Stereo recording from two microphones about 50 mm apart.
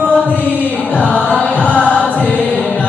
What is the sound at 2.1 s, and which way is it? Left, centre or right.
Choir, left.